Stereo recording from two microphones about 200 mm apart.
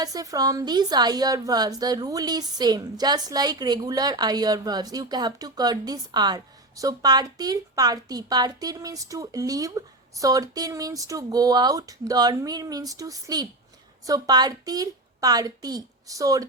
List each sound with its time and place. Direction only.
0.0 s a woman's voice: 20° right (ahead or behind)